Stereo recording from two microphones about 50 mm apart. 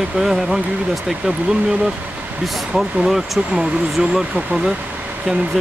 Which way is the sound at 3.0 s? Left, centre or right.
Centre.